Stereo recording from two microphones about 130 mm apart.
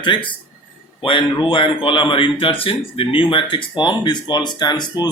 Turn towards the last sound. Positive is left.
turn(degrees=35)  # may be behind; listen again after turning